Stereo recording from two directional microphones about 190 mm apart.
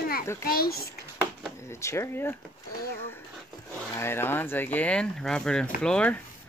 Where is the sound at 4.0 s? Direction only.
10° left (ahead or behind).